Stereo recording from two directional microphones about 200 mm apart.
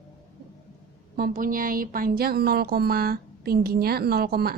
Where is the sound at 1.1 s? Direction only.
45° right (ahead or behind).